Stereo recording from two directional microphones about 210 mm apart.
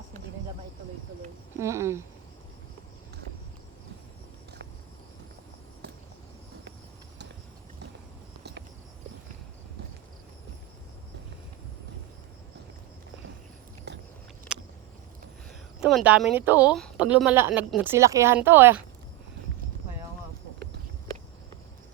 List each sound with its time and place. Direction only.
1.5 s a woman's voice: 15° right (ahead or behind)
13.9 s biting: 55° right (ahead or behind)
14.5 s a sound: 5° right (ahead or behind)
15.8 s a woman's voice: centre (ahead or behind)